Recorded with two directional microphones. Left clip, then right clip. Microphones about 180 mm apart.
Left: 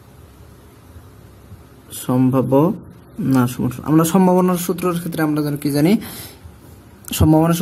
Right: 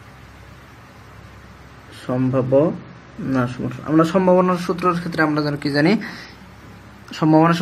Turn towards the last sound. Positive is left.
turn(degrees=55)  # may be behind; listen again after turning